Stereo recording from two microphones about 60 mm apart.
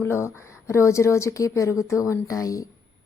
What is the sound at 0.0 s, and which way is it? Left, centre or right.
A woman's voice, left.